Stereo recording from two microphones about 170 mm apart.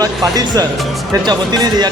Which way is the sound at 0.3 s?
20° right (ahead or behind).